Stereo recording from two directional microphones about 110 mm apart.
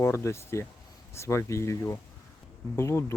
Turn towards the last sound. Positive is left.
turn(degrees=25)  # may be behind; listen again after turning